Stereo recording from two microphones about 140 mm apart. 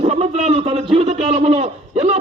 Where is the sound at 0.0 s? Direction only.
50° right (ahead or behind).